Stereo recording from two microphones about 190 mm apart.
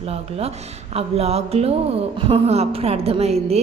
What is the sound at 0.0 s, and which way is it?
Speech, 30° right (ahead or behind).